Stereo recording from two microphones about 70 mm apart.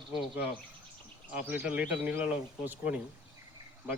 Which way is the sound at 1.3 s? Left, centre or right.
Right.